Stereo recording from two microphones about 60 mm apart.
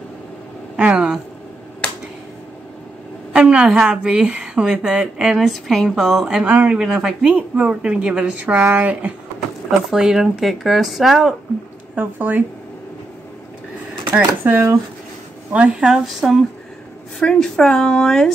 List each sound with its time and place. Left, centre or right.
0.9 s speech: centre
3.3 s speech: centre
6.4 s speech: right
6.7 s speech: centre; by 9.1 s right
9.7 s speech: centre
12.0 s speech: right
14.1 s speech: right
15.5 s speech: centre
16.2 s speech: centre
17.2 s speech: centre